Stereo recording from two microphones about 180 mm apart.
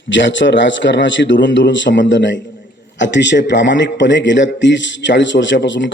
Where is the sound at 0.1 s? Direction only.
90° left.